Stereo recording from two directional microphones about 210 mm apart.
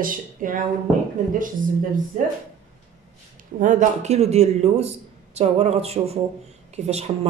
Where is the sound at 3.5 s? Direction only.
35° right (ahead or behind).